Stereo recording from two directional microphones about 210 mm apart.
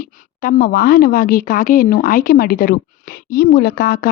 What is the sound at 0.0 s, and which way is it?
A woman's voice, 40° left (ahead or behind).